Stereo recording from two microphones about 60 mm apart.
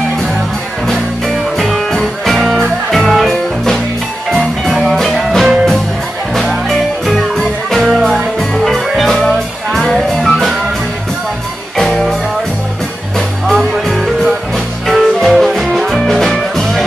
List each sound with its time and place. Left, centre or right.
0.8 s music: centre
11.7 s music: centre
13.5 s music: centre